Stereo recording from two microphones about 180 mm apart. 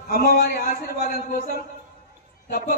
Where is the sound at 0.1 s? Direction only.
55° left (ahead or behind).